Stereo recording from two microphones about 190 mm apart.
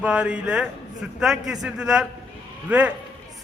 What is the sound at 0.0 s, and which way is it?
A man's voice, 5° right (ahead or behind).